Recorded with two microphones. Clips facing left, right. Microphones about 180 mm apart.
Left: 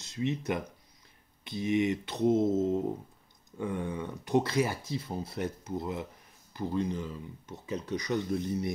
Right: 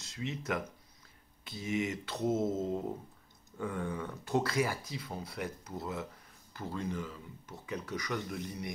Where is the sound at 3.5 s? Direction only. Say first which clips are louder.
Left 3 dB; 20° left (ahead or behind).